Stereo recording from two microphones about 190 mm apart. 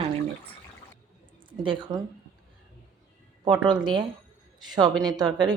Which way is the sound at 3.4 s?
25° right (ahead or behind).